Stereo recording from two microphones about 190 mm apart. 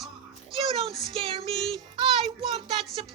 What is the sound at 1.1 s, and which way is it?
Speech, 30° right (ahead or behind).